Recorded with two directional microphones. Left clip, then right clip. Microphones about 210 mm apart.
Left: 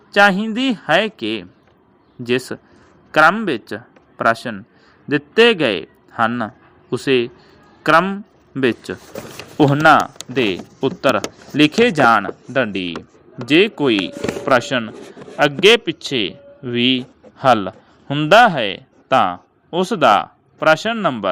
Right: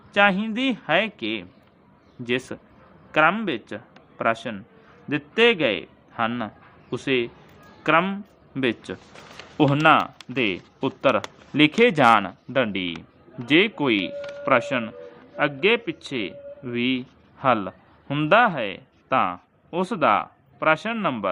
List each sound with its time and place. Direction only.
0.1 s a man's voice: 25° left (ahead or behind)